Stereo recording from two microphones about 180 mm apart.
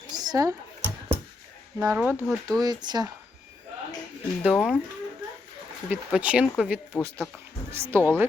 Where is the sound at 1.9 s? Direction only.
5° right (ahead or behind).